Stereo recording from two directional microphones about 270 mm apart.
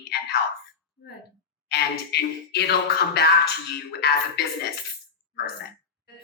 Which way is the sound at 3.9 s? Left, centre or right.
Left.